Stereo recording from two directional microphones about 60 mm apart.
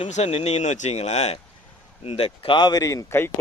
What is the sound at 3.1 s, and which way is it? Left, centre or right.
Speech, left.